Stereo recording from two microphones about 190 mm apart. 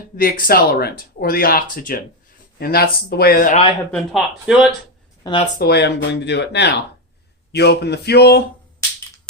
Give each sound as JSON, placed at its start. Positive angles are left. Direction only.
{"t": 0.2, "sound": "speech", "side_deg": 50}
{"t": 3.9, "sound": "speech", "side_deg": 0}
{"t": 5.5, "sound": "speech", "side_deg": 60}